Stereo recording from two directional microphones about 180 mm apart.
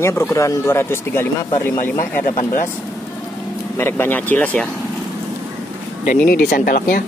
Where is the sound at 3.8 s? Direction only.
10° left (ahead or behind).